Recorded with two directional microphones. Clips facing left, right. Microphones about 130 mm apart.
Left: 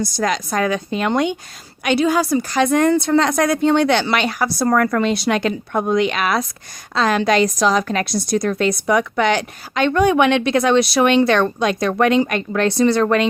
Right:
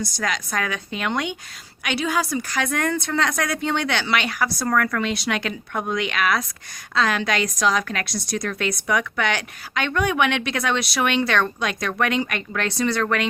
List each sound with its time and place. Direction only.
0.0 s a woman's voice: 35° left (ahead or behind)